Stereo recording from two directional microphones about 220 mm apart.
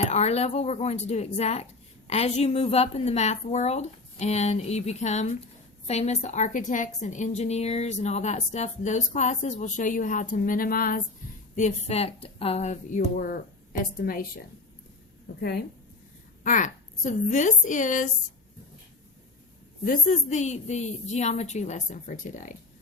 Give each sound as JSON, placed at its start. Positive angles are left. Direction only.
{"t": 0.0, "sound": "a woman's voice", "side_deg": 30}
{"t": 15.4, "sound": "a woman's voice", "side_deg": 45}
{"t": 16.4, "sound": "a woman's voice", "side_deg": 35}
{"t": 19.8, "sound": "a woman's voice", "side_deg": 40}